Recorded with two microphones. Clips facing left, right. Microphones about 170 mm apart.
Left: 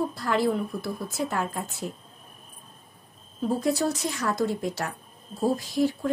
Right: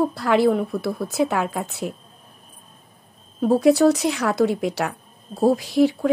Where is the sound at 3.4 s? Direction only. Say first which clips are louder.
Right 10 dB; 70° right (ahead or behind).